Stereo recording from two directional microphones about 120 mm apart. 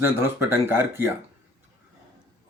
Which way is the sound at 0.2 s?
20° right (ahead or behind).